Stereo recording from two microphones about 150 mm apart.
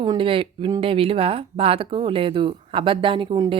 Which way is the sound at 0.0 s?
30° right (ahead or behind).